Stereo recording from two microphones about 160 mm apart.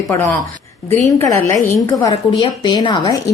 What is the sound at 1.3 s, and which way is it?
A woman's voice, 20° left (ahead or behind).